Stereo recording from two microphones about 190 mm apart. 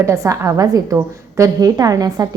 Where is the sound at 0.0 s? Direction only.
15° right (ahead or behind).